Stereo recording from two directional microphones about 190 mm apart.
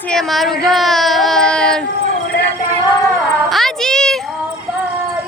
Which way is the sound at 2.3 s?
75° left (ahead or behind).